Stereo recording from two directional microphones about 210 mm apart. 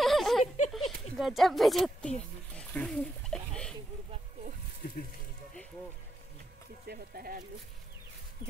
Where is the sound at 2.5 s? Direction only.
5° left (ahead or behind).